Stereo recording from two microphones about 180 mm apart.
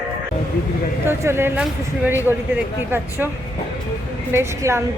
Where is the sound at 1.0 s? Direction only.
15° right (ahead or behind).